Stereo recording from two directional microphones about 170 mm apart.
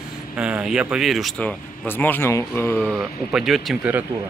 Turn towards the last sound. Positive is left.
turn(degrees=-5)  # may be behind; listen again after turning